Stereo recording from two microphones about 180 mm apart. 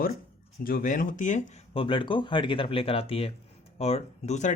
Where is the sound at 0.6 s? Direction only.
50° left (ahead or behind).